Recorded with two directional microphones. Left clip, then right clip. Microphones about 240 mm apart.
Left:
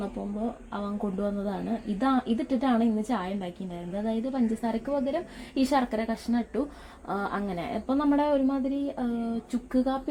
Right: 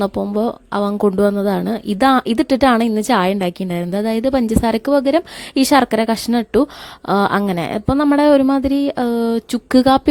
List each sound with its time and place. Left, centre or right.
0.7 s a woman's voice: right